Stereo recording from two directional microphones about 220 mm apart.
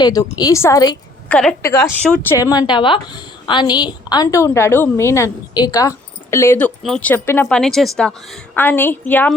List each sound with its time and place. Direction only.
0.0 s a woman's voice: 15° left (ahead or behind)